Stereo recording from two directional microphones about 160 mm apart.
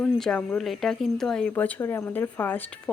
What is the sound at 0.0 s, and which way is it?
Speech, 5° left (ahead or behind).